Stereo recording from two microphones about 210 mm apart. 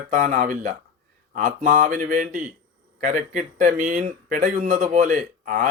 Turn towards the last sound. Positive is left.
turn(degrees=-40)  # may be behind; listen again after turning